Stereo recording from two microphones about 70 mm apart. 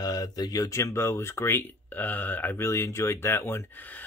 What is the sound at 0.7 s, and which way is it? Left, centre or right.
Speech, left.